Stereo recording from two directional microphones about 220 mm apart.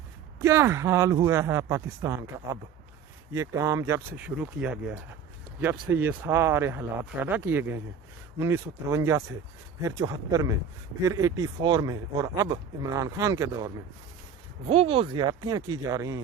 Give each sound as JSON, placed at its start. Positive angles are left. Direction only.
{"t": 0.4, "sound": "speech", "side_deg": -10}
{"t": 14.7, "sound": "speech", "side_deg": -25}